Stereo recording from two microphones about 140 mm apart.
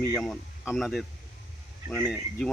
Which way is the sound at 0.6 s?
Centre (ahead or behind).